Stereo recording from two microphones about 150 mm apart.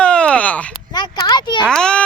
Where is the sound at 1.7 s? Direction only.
5° left (ahead or behind).